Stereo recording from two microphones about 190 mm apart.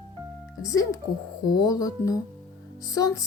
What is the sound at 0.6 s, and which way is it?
Speech, 20° left (ahead or behind).